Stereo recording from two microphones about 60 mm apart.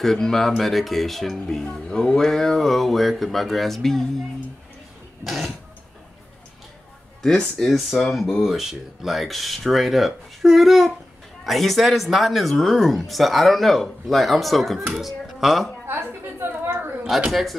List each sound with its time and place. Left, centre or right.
0.0 s speech: centre
5.2 s speech: centre
7.2 s speech: centre
15.9 s a sound: right
17.3 s speech: centre